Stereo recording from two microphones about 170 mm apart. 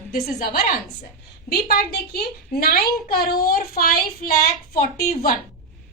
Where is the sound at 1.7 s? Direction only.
65° left (ahead or behind).